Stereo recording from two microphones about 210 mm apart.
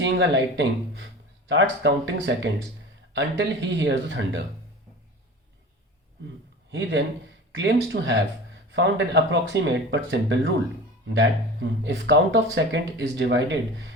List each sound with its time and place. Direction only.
0.0 s speech: 60° right (ahead or behind)
6.7 s speech: 60° right (ahead or behind)